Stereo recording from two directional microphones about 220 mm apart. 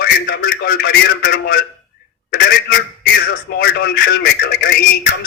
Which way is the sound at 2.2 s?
45° left (ahead or behind).